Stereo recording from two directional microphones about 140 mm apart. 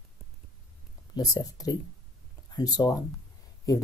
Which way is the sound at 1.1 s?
25° left (ahead or behind).